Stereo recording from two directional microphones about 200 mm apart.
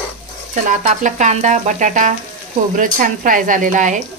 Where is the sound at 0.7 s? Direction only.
40° right (ahead or behind).